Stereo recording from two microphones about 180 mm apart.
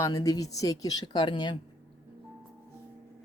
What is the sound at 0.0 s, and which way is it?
Speech, 20° left (ahead or behind).